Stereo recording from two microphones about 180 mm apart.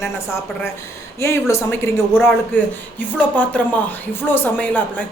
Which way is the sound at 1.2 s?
15° left (ahead or behind).